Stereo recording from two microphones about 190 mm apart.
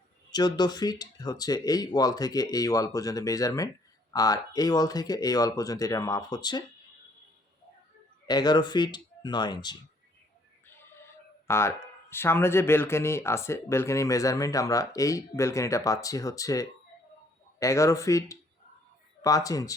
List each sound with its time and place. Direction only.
0.3 s speech: 20° left (ahead or behind)
8.3 s speech: 20° left (ahead or behind)
11.4 s speech: 15° left (ahead or behind)